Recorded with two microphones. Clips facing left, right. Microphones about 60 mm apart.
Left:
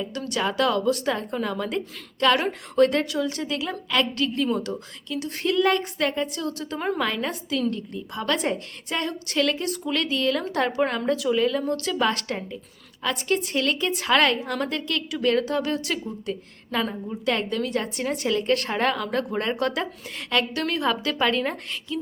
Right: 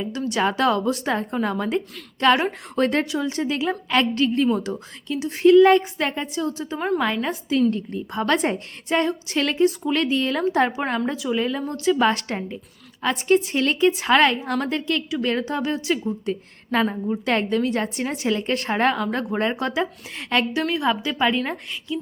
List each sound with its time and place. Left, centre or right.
0.3 s a woman's voice: right
6.6 s a woman's voice: centre
7.7 s a woman's voice: right
9.6 s a woman's voice: centre
10.0 s a woman's voice: right; by 11.3 s centre
11.3 s a woman's voice: right
11.9 s a woman's voice: right; by 16.1 s centre
16.2 s a woman's voice: right
19.0 s a woman's voice: centre
20.1 s a woman's voice: right
20.5 s a woman's voice: centre